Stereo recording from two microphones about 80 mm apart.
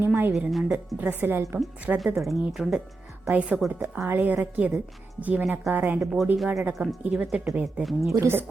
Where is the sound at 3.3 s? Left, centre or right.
Centre.